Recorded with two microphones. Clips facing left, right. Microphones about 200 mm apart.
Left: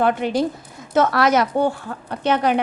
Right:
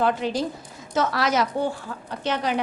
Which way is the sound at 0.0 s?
60° left (ahead or behind).